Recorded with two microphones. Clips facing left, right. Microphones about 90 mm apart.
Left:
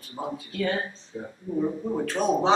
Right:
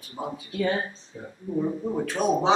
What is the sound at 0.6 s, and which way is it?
Speech, 15° right (ahead or behind).